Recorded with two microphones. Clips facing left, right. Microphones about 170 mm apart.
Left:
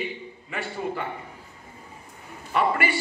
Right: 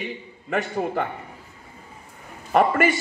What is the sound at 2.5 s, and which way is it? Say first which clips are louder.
Speech: right 5 dB; 45° right (ahead or behind).